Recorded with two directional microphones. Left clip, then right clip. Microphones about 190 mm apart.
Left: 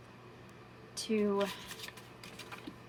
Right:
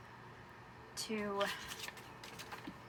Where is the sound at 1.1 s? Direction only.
20° left (ahead or behind).